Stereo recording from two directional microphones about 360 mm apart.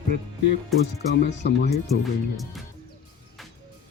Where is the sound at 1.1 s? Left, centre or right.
Left.